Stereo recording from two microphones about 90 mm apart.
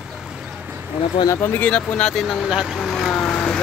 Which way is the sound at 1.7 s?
10° left (ahead or behind).